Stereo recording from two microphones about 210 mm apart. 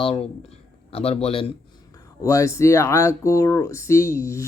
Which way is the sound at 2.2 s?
15° left (ahead or behind).